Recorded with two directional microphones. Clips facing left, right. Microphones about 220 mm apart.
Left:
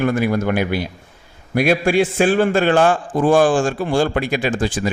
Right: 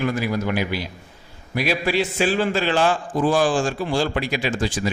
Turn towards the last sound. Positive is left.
turn(degrees=50)  # may be behind; listen again after turning